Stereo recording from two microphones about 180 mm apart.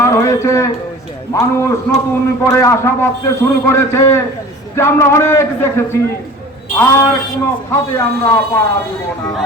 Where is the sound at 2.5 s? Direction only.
15° left (ahead or behind).